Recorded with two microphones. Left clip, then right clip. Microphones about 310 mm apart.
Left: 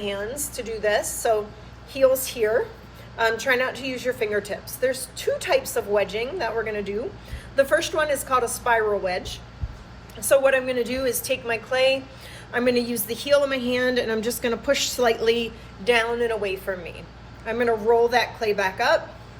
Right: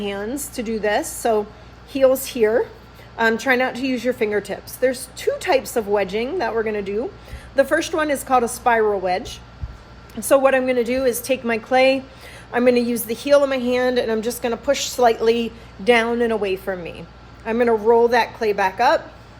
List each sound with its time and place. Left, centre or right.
0.0 s a woman's voice: right